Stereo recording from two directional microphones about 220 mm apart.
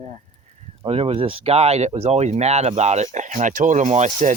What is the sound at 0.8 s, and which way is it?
Speech, 25° right (ahead or behind).